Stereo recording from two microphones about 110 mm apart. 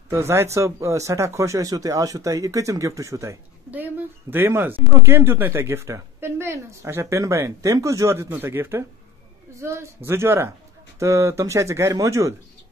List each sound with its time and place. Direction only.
0.1 s a woman's voice: 25° right (ahead or behind)
3.7 s a woman's voice: 15° right (ahead or behind)